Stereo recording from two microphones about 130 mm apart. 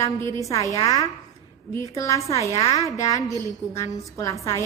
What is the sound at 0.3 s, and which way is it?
Speech, 25° left (ahead or behind).